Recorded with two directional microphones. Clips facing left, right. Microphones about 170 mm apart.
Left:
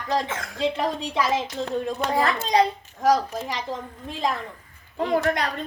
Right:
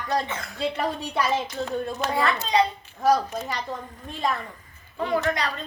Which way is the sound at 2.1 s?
40° left (ahead or behind).